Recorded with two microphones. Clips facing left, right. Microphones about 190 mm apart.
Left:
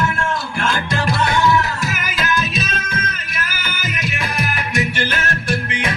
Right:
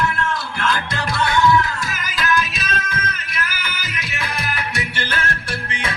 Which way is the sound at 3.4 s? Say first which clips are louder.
Left 2 dB; 25° left (ahead or behind).